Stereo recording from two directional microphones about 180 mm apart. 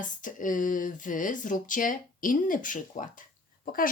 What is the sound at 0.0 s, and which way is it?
Speech, 45° left (ahead or behind).